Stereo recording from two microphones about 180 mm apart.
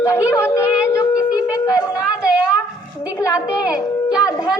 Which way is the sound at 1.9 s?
5° right (ahead or behind).